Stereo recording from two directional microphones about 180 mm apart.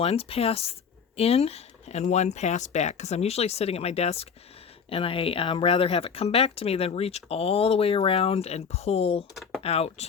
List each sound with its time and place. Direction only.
0.0 s speech: 35° left (ahead or behind)
9.3 s speech: centre (ahead or behind)
9.6 s speech: 35° left (ahead or behind)